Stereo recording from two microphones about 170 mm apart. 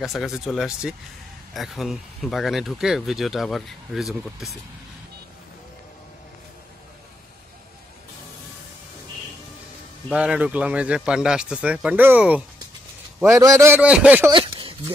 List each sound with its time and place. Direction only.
0.0 s speech: centre (ahead or behind)
10.0 s speech: 5° right (ahead or behind)
14.3 s a sound: 30° right (ahead or behind)